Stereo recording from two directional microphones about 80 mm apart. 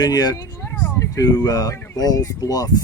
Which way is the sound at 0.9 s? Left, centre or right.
Left.